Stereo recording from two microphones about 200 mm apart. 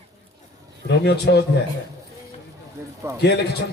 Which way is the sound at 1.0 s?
55° left (ahead or behind).